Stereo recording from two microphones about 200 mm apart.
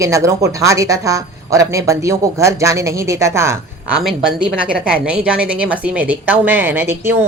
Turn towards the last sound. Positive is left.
turn(degrees=-10)  # may be behind; listen again after turning